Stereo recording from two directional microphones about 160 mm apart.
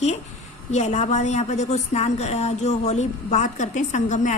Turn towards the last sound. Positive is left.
turn(degrees=50)  # may be behind; listen again after turning